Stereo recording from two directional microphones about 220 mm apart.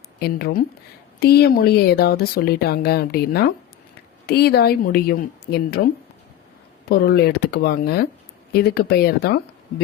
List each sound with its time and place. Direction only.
0.2 s speech: 45° left (ahead or behind)
6.8 s speech: 45° left (ahead or behind)